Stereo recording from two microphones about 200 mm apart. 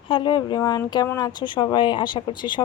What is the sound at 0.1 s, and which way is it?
Speech, 20° left (ahead or behind).